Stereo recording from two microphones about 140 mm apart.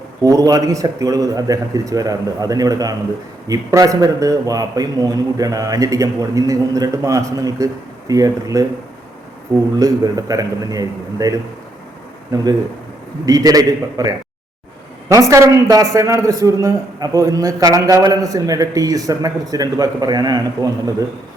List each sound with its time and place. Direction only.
0.2 s a man's voice: 25° right (ahead or behind)
9.7 s a man's voice: 25° right (ahead or behind)
13.2 s a man's voice: 25° right (ahead or behind)